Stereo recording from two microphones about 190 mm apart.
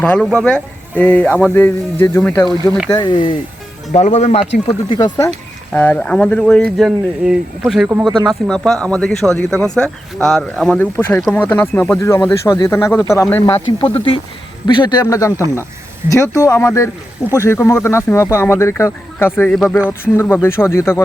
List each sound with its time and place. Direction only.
0.0 s a man's voice: 5° left (ahead or behind)
2.9 s speech: 25° left (ahead or behind)
3.9 s speech: 35° left (ahead or behind)
4.9 s a man's voice: 20° left (ahead or behind)